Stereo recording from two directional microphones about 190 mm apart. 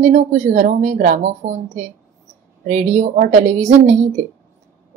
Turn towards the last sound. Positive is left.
turn(degrees=-40)  # may be behind; listen again after turning